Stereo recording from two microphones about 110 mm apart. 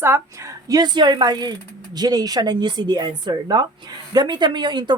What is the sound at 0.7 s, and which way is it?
A woman's voice, 40° right (ahead or behind).